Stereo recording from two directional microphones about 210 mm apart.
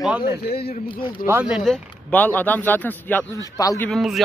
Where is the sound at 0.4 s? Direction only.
50° left (ahead or behind).